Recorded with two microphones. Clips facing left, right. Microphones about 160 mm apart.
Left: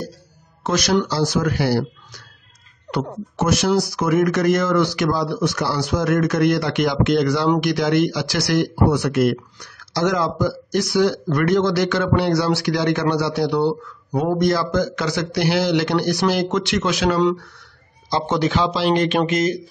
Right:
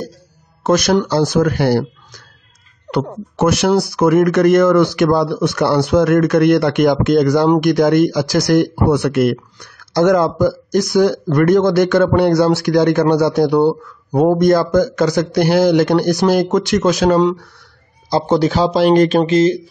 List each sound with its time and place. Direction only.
0.7 s speech: 50° right (ahead or behind)
2.9 s speech: 65° right (ahead or behind); by 19.6 s 30° right (ahead or behind)